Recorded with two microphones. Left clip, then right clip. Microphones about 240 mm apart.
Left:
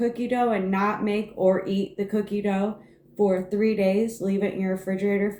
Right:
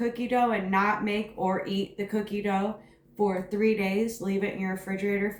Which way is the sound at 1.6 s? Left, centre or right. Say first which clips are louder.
Left 3 dB; centre.